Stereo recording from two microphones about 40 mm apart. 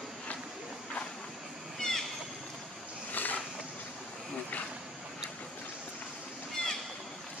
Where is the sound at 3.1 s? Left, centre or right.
Left.